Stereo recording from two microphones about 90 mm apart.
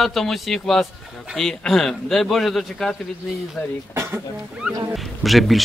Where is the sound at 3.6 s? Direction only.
25° left (ahead or behind).